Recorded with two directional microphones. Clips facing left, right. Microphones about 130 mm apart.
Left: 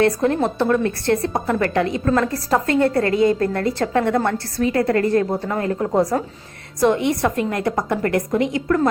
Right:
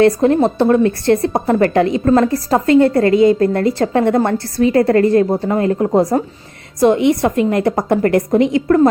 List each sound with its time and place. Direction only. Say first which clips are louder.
0.0 s a woman's voice: right 6 dB; 25° right (ahead or behind)